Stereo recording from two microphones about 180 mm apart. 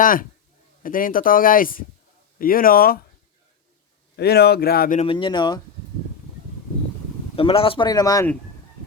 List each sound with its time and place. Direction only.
0.0 s speech: 50° left (ahead or behind)
4.2 s speech: 65° left (ahead or behind)
4.9 s speech: 30° left (ahead or behind)
7.3 s speech: 30° left (ahead or behind)